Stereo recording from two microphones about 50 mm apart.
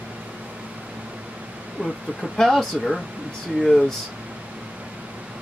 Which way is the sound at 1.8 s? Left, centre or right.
Right.